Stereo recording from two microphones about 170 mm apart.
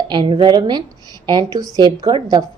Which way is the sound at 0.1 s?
25° right (ahead or behind).